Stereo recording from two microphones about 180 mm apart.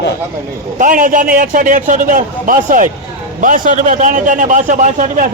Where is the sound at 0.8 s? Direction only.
50° right (ahead or behind).